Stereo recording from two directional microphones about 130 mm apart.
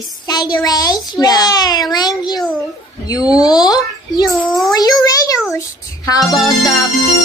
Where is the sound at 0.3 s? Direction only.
35° left (ahead or behind).